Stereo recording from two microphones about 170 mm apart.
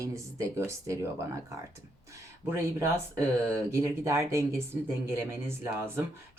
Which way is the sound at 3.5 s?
15° right (ahead or behind).